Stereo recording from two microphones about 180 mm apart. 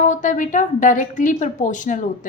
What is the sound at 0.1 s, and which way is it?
A woman's voice, 45° left (ahead or behind).